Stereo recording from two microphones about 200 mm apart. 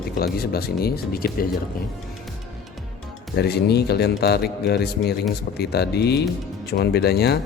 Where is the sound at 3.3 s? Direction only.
55° left (ahead or behind).